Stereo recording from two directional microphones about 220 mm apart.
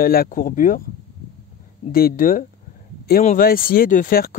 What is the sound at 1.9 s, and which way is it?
Speech, 40° left (ahead or behind).